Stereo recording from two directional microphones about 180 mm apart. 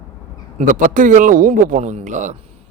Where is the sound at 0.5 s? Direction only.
45° right (ahead or behind).